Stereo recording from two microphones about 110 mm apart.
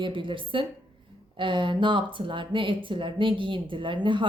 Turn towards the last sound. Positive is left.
turn(degrees=-50)  # may be behind; listen again after turning